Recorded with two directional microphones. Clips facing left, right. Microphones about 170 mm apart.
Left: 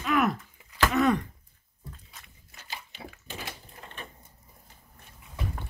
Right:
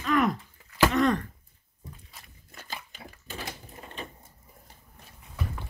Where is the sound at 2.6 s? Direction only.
50° right (ahead or behind).